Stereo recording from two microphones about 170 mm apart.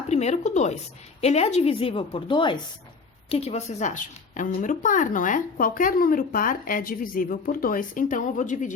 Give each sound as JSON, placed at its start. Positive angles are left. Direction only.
{"t": 0.1, "sound": "a woman's voice", "side_deg": 40}